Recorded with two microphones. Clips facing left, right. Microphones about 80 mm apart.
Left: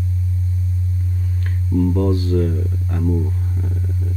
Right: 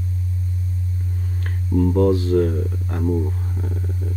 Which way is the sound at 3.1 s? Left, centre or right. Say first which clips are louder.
Right 1 dB; centre.